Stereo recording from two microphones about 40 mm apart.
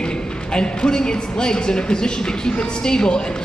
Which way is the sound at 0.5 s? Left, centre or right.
Centre.